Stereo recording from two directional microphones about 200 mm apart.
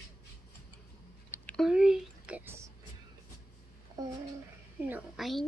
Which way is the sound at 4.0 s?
15° right (ahead or behind).